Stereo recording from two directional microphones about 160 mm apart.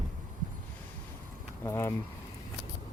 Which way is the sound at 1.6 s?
15° left (ahead or behind).